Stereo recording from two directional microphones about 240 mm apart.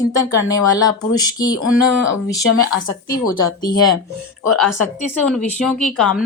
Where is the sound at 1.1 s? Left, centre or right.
Centre.